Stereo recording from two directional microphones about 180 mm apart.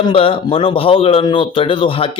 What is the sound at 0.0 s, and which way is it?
Speech, 30° left (ahead or behind).